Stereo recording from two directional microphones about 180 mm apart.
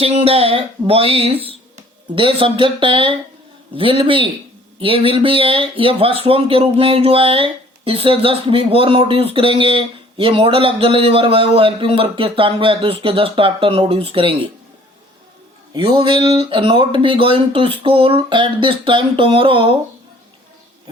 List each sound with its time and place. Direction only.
0.0 s speech: 35° right (ahead or behind)
15.7 s speech: 25° right (ahead or behind)